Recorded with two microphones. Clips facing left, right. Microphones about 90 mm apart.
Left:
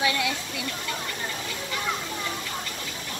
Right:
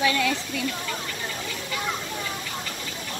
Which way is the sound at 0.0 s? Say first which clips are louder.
Right 3 dB; 15° left (ahead or behind).